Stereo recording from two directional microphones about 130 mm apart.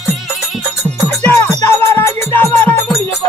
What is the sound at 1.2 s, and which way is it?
Music, 15° left (ahead or behind).